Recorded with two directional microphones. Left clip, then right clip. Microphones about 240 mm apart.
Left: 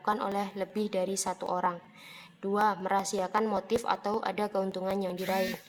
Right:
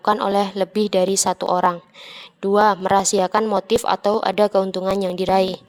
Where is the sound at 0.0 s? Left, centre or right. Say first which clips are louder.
Right 12 dB; right.